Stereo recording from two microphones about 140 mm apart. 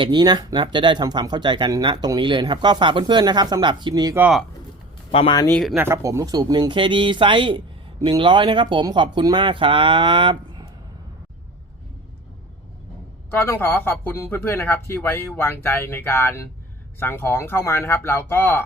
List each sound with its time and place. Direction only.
0.0 s speech: 30° right (ahead or behind)
5.7 s speech: 15° right (ahead or behind); by 10.7 s 35° right (ahead or behind)
13.3 s speech: 15° left (ahead or behind)